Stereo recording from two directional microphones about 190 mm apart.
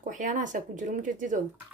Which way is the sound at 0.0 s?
40° right (ahead or behind).